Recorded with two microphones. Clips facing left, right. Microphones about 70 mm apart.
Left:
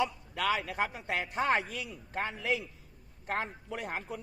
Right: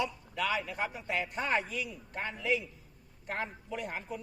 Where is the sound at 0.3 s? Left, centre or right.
Left.